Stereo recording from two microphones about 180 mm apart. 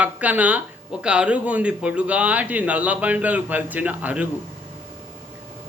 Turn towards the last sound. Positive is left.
turn(degrees=-10)  # may be behind; listen again after turning